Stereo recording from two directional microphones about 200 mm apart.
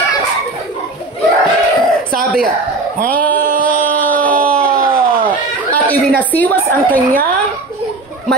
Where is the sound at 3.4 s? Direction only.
40° right (ahead or behind).